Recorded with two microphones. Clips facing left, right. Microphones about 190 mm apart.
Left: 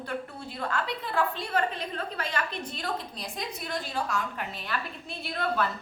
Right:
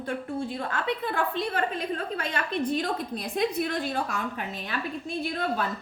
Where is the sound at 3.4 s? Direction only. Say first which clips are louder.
Right 9 dB; 60° right (ahead or behind).